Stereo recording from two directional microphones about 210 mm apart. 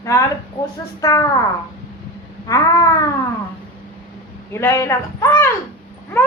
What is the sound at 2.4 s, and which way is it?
Speech, 15° left (ahead or behind).